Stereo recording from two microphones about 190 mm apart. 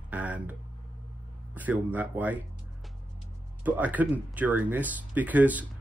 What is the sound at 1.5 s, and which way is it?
Speech, 10° right (ahead or behind).